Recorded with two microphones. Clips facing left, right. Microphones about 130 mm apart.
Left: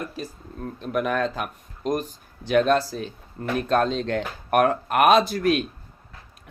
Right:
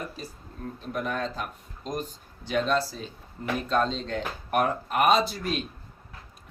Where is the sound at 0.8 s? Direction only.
70° left (ahead or behind).